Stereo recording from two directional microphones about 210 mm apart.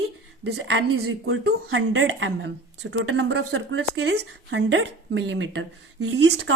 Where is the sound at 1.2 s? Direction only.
65° right (ahead or behind).